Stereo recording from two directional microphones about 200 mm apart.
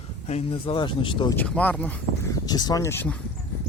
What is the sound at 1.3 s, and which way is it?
Speech, 5° left (ahead or behind).